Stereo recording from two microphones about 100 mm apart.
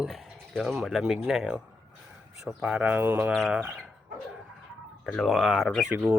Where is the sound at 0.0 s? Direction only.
Centre (ahead or behind).